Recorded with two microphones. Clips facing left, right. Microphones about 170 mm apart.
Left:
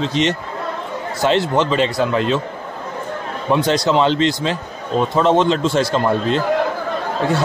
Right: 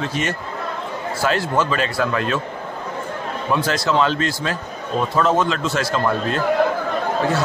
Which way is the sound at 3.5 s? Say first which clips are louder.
Left 4 dB; 25° left (ahead or behind).